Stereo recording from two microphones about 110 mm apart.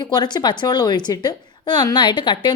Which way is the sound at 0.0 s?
40° left (ahead or behind).